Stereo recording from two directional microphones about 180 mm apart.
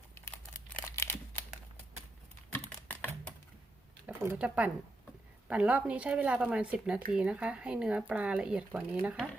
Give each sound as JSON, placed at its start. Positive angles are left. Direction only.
{"t": 0.9, "sound": "crumpling", "side_deg": 15}
{"t": 2.5, "sound": "typing", "side_deg": 10}
{"t": 4.0, "sound": "speech", "side_deg": -10}